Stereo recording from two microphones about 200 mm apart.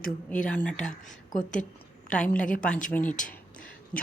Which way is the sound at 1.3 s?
40° left (ahead or behind).